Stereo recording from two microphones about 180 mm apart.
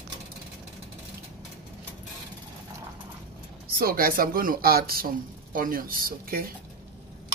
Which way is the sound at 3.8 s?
55° right (ahead or behind).